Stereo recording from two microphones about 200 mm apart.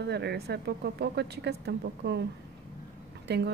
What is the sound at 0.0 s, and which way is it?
Speech, 55° right (ahead or behind).